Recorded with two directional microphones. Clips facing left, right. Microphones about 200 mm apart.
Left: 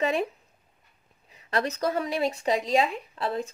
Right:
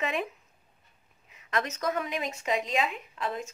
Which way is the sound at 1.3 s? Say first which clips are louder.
Left 4 dB; 35° left (ahead or behind).